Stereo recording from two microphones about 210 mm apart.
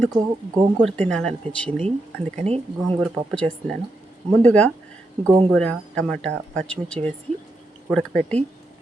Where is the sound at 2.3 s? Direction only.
30° right (ahead or behind).